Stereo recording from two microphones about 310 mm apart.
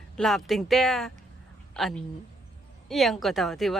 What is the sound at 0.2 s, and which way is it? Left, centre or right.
Speech, centre.